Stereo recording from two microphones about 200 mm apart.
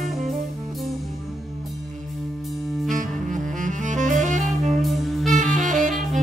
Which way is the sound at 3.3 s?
40° right (ahead or behind).